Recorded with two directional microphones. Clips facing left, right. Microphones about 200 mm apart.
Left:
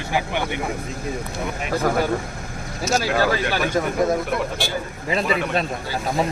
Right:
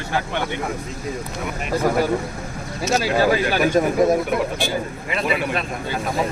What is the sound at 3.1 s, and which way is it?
Speech, 15° right (ahead or behind).